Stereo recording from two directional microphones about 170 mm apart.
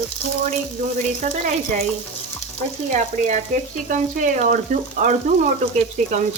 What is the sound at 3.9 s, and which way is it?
A woman's voice, 50° right (ahead or behind).